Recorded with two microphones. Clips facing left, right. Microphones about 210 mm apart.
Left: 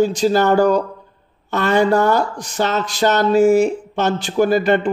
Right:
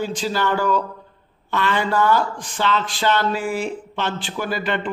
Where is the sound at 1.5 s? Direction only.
45° left (ahead or behind).